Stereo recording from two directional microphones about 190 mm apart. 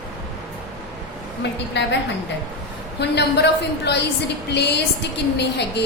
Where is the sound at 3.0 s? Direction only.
60° left (ahead or behind).